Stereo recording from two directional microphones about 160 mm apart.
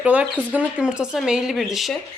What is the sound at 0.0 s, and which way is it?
Speech, 10° right (ahead or behind).